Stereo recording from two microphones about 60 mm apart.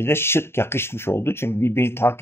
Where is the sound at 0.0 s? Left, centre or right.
Left.